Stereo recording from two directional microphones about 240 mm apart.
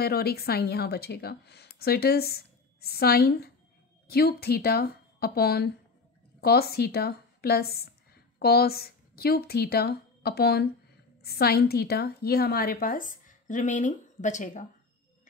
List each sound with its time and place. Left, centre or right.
0.0 s a woman's voice: left